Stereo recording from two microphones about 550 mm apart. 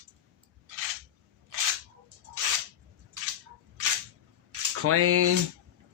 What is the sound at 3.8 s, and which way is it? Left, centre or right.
Single-lens reflex camera, right.